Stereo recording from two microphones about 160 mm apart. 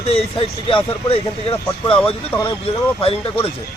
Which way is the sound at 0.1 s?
35° left (ahead or behind).